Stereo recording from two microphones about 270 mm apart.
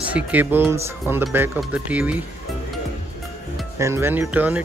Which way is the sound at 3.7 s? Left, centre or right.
Centre.